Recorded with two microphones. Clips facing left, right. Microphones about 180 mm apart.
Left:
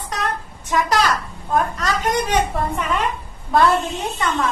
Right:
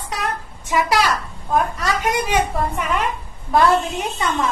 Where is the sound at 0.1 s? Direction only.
10° right (ahead or behind).